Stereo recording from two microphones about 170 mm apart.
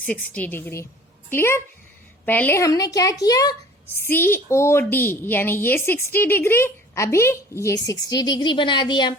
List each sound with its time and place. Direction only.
0.0 s a woman's voice: 10° left (ahead or behind); by 9.1 s 25° left (ahead or behind)